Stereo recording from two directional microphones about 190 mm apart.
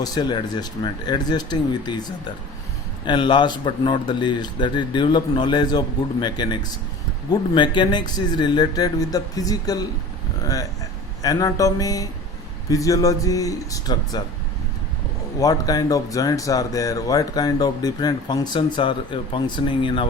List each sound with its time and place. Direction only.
0.0 s speech: 20° left (ahead or behind)
15.4 s speech: 20° left (ahead or behind)